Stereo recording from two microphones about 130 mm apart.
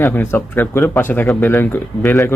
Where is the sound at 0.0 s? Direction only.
15° left (ahead or behind).